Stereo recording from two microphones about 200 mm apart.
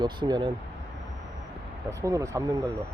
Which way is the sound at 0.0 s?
20° right (ahead or behind).